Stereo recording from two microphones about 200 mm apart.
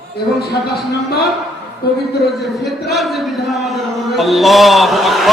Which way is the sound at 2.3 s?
Centre (ahead or behind).